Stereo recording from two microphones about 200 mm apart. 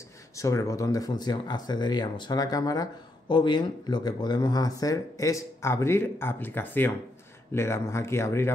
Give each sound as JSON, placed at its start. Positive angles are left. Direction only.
{"t": 0.4, "sound": "speech", "side_deg": 15}